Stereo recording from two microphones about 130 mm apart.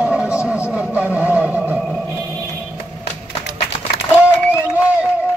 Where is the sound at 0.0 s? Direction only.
5° right (ahead or behind).